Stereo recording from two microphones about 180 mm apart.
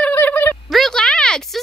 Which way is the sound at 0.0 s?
10° left (ahead or behind).